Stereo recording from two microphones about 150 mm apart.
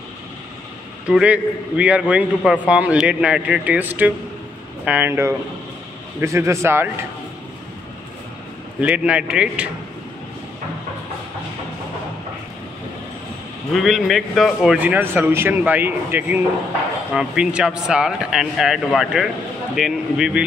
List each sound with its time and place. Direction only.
1.0 s a man's voice: 5° right (ahead or behind)
8.8 s a man's voice: 10° right (ahead or behind)
13.7 s a man's voice: centre (ahead or behind)